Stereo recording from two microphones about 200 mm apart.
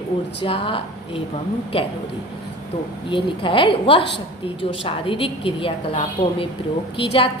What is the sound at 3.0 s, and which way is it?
A woman's voice, 25° left (ahead or behind).